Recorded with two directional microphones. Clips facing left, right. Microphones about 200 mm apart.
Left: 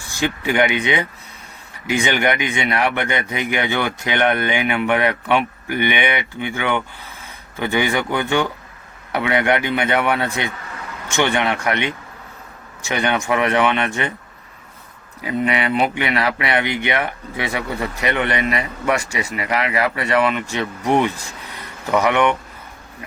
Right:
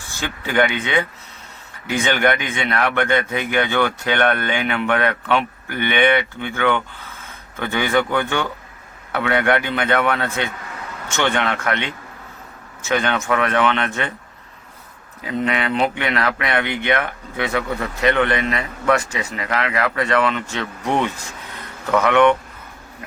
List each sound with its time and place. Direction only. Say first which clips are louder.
0.1 s speech: left 4 dB; 15° left (ahead or behind)
15.2 s speech: left 1 dB; 10° left (ahead or behind)